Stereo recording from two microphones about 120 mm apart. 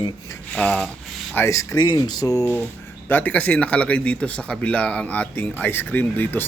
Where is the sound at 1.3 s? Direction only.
25° left (ahead or behind).